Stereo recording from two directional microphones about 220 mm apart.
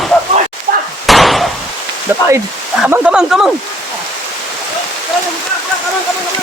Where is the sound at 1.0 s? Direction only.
Centre (ahead or behind).